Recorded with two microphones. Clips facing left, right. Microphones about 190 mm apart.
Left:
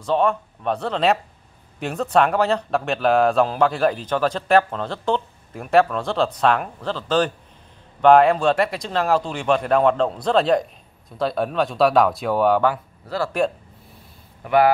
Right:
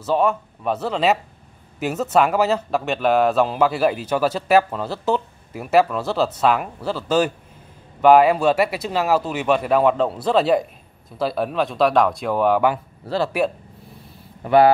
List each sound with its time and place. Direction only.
0.0 s speech: 5° right (ahead or behind)
12.6 s speech: 20° right (ahead or behind)
14.4 s speech: 30° right (ahead or behind)